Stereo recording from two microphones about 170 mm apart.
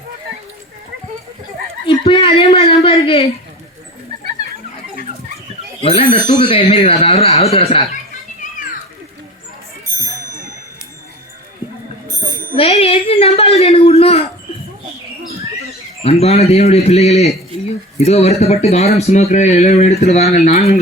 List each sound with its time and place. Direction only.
2.0 s speech: 30° left (ahead or behind)
5.8 s speech: 35° left (ahead or behind)
12.2 s bicycle bell: 60° right (ahead or behind)
12.5 s speech: 35° left (ahead or behind)
16.0 s speech: 35° left (ahead or behind)